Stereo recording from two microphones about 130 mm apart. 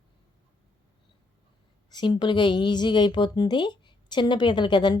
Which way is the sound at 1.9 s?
35° left (ahead or behind).